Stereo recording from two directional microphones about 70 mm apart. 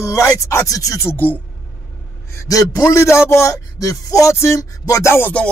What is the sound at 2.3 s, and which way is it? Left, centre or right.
Speech, left.